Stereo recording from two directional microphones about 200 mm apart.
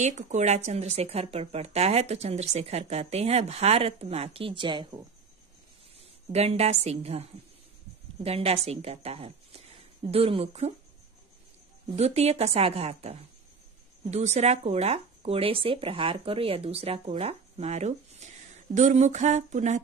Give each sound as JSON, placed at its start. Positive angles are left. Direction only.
{"t": 0.3, "sound": "a woman's voice", "side_deg": -35}
{"t": 11.9, "sound": "speech", "side_deg": -30}